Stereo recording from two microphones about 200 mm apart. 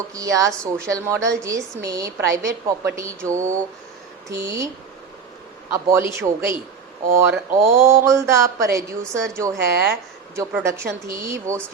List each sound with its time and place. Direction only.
0.1 s a woman's voice: 15° right (ahead or behind)
0.5 s a woman's voice: 5° left (ahead or behind)
1.1 s a woman's voice: 15° right (ahead or behind)
3.3 s speech: 40° right (ahead or behind)
4.3 s a woman's voice: 15° right (ahead or behind)
5.7 s a woman's voice: 15° right (ahead or behind)
9.7 s speech: 55° right (ahead or behind)
10.3 s a woman's voice: 15° right (ahead or behind)